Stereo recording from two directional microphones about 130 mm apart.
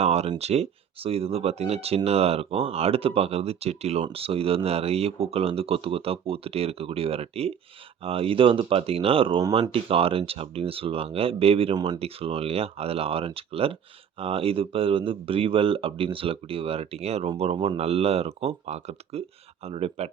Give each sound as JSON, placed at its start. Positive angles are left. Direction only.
{"t": 0.0, "sound": "speech", "side_deg": -55}
{"t": 11.7, "sound": "speech", "side_deg": -35}
{"t": 11.9, "sound": "speech", "side_deg": -50}